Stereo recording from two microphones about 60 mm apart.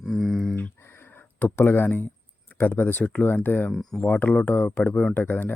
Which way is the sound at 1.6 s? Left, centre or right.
Left.